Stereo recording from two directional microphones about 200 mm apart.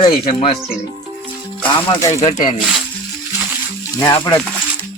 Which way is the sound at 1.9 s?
20° left (ahead or behind).